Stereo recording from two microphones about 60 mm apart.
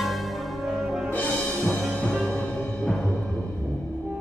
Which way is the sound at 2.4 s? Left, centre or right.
Centre.